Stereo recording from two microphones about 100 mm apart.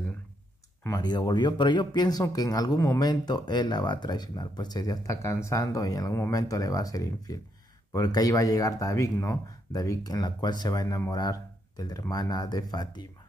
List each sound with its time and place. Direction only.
0.9 s speech: 45° left (ahead or behind)